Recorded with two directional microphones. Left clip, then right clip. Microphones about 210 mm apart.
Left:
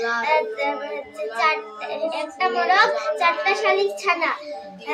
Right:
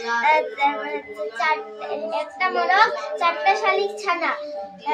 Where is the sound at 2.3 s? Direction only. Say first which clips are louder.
Even; 20° left (ahead or behind).